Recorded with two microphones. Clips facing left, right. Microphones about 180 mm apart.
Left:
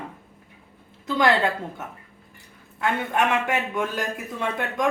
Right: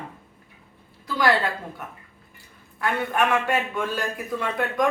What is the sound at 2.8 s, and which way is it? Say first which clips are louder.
A man's voice: even; 20° left (ahead or behind).